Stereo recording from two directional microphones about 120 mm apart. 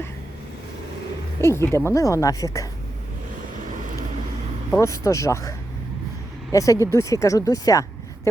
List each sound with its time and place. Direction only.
1.4 s a woman's voice: 20° left (ahead or behind)
4.8 s a woman's voice: 25° left (ahead or behind)